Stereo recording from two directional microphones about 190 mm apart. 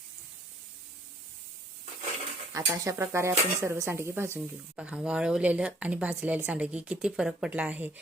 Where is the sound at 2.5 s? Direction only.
15° right (ahead or behind).